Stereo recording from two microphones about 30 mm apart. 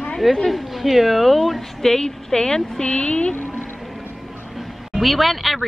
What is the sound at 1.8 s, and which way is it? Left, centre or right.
A woman's voice, left.